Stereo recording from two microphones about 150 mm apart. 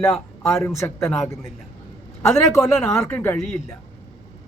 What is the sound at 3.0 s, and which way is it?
Speech, 10° left (ahead or behind).